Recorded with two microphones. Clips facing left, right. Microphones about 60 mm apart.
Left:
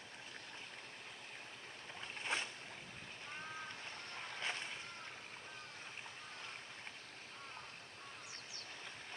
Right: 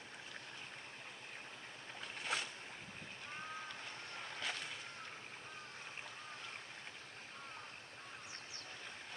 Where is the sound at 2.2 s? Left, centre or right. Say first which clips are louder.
Even; left.